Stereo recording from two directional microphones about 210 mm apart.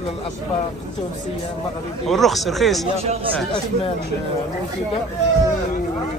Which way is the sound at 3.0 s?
30° right (ahead or behind).